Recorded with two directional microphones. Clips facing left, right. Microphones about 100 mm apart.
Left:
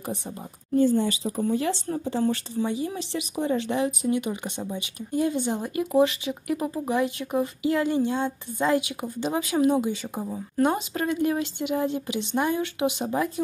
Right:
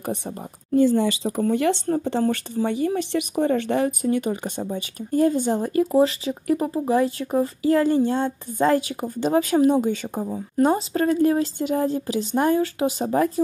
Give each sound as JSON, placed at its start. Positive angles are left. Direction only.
{"t": 0.7, "sound": "speech", "side_deg": -90}
{"t": 1.4, "sound": "speech", "side_deg": -70}